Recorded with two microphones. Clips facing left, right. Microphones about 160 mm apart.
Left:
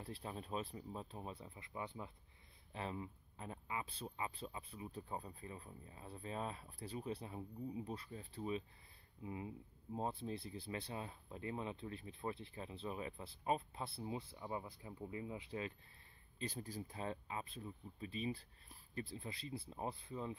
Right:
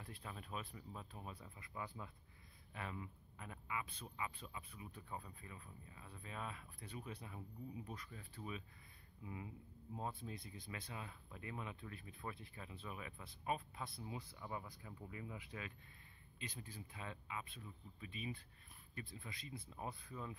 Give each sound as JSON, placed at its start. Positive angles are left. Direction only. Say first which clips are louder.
{"t": 0.0, "sound": "speech", "louder": "left 5 dB", "side_deg": 30}
{"t": 16.3, "sound": "speech", "louder": "left 7 dB", "side_deg": 40}